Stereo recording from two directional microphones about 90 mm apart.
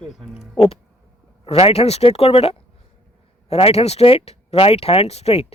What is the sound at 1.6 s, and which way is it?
Speech, 90° left.